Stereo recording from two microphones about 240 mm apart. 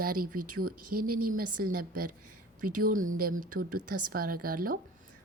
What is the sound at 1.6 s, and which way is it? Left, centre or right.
A woman's voice, right.